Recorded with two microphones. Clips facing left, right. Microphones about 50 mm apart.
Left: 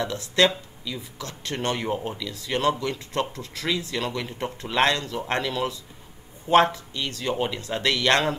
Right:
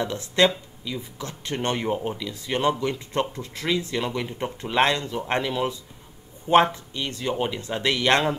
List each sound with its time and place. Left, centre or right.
0.0 s speech: right
1.9 s speech: centre
2.1 s speech: right